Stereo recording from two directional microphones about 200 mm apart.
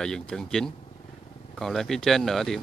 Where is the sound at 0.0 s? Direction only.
5° left (ahead or behind).